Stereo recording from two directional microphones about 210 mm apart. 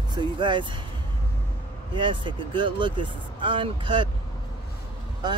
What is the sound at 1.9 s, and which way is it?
Speech, 20° right (ahead or behind).